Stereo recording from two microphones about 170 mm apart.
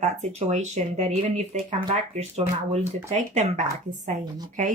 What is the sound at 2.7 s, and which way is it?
A woman's voice, 40° right (ahead or behind).